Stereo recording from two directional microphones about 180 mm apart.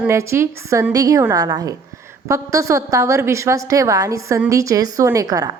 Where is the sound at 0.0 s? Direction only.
15° right (ahead or behind).